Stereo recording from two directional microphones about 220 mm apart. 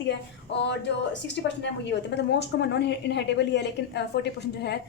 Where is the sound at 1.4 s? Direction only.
55° left (ahead or behind).